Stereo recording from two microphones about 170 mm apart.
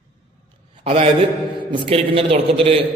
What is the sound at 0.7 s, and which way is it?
A man's voice, 35° right (ahead or behind).